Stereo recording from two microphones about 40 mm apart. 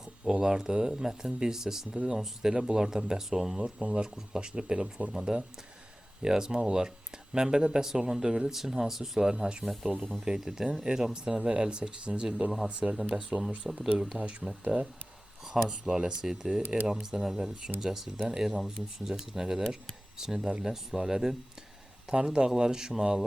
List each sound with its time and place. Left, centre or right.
0.3 s speech: centre
3.6 s speech: right; by 9.3 s centre
9.3 s speech: right
13.7 s speech: centre
14.1 s speech: right
15.5 s speech: centre